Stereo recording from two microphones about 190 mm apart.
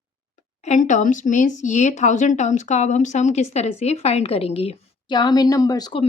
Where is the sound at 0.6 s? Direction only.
40° left (ahead or behind).